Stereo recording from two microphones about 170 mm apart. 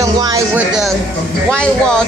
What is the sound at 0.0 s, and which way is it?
Music, 20° right (ahead or behind).